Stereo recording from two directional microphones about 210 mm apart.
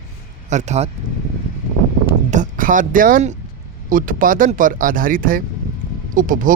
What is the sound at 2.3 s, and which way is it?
Speech, 40° right (ahead or behind).